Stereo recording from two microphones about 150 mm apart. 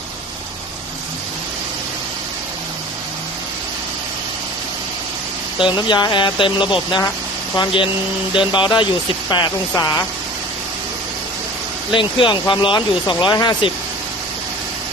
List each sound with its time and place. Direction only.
5.5 s speech: 30° left (ahead or behind)
11.9 s speech: 35° left (ahead or behind)